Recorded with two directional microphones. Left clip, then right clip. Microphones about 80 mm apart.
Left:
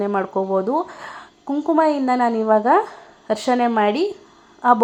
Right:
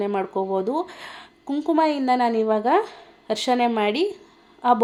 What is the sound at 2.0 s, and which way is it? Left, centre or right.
Speech, centre.